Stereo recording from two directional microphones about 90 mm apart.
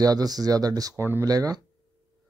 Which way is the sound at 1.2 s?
45° right (ahead or behind).